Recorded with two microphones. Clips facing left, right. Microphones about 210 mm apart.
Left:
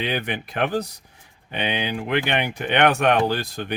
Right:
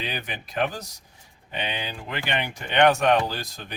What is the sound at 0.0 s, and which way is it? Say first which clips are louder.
Speech: left 7 dB; 65° left (ahead or behind).